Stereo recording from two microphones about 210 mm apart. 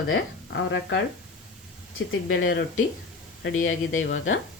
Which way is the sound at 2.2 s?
65° left (ahead or behind).